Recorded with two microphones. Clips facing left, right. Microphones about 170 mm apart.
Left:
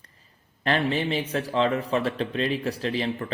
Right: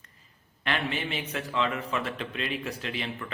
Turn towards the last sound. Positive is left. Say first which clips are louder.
# left 7 dB
turn(degrees=35)  # may be behind; listen again after turning